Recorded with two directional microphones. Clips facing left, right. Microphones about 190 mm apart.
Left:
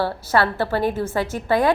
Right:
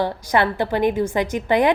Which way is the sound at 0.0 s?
15° right (ahead or behind).